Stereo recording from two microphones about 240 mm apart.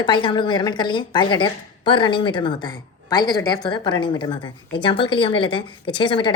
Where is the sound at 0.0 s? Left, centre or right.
Centre.